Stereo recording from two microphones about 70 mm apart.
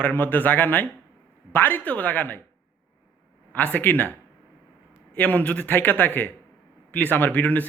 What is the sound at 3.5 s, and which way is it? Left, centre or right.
Speech, left.